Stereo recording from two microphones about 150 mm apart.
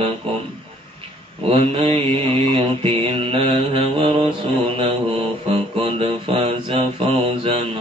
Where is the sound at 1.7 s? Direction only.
40° right (ahead or behind).